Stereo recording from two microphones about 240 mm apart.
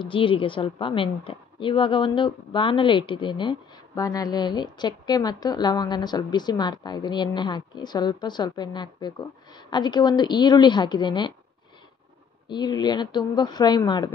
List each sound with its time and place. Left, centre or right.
0.0 s a woman's voice: left
12.4 s a woman's voice: centre